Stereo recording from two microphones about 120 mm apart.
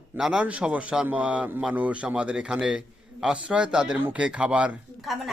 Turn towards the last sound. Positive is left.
turn(degrees=-10)  # may be behind; listen again after turning